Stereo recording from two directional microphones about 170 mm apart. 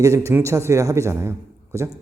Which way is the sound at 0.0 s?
15° right (ahead or behind).